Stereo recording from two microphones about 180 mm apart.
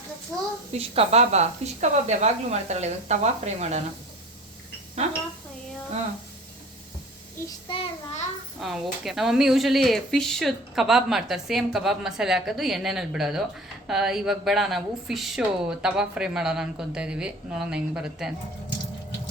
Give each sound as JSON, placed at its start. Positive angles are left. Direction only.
{"t": 0.7, "sound": "a woman's voice", "side_deg": -35}
{"t": 5.0, "sound": "a woman's voice", "side_deg": -35}
{"t": 7.7, "sound": "a child's voice", "side_deg": 35}
{"t": 8.6, "sound": "speech", "side_deg": 0}